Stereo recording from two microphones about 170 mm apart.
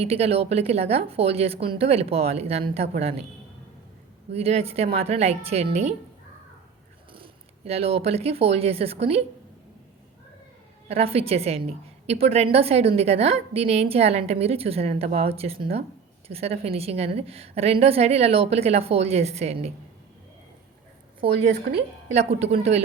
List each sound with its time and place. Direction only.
0.0 s a woman's voice: 35° right (ahead or behind)
4.3 s a woman's voice: 35° right (ahead or behind)
7.1 s speech: 35° right (ahead or behind)
10.8 s a woman's voice: 35° right (ahead or behind)
21.7 s a woman's voice: 75° right (ahead or behind)
22.3 s a woman's voice: 40° right (ahead or behind)